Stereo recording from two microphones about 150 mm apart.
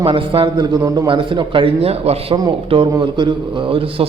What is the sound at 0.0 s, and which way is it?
A man's voice, 35° right (ahead or behind).